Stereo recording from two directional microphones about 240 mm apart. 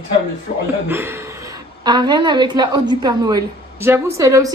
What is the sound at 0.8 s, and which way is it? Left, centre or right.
A woman's voice, centre.